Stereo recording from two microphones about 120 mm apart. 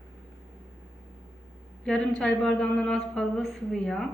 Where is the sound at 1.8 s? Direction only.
5° left (ahead or behind).